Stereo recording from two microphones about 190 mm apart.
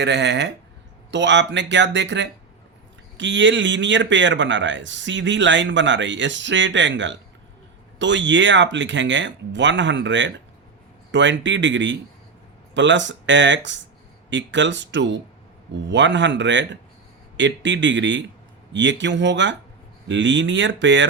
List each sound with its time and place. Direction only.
0.0 s a man's voice: 65° right (ahead or behind)